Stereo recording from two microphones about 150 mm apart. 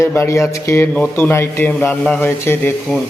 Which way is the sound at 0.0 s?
20° left (ahead or behind).